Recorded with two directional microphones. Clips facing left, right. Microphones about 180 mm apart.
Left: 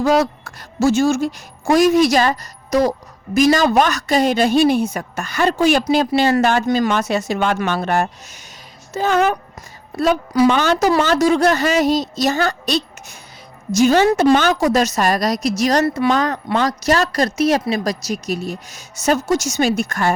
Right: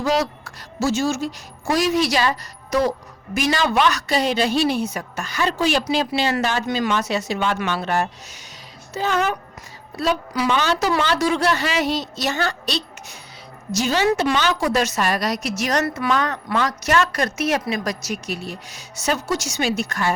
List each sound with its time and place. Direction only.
0.0 s a woman's voice: 50° left (ahead or behind)